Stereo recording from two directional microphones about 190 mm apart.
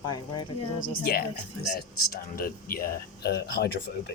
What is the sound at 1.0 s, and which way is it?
Speech, 55° left (ahead or behind).